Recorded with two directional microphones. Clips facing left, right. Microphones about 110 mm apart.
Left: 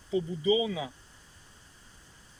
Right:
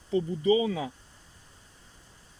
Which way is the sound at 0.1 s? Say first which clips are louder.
Right 3 dB; 50° right (ahead or behind).